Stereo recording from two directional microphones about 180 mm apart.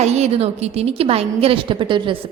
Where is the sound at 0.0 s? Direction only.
40° right (ahead or behind).